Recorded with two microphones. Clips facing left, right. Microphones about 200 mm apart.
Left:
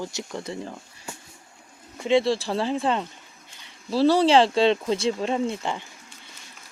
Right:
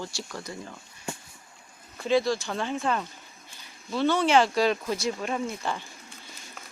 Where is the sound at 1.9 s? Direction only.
25° left (ahead or behind).